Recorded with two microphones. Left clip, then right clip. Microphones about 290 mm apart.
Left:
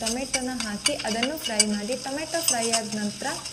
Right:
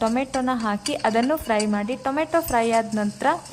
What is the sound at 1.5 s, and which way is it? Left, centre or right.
A woman's voice, centre.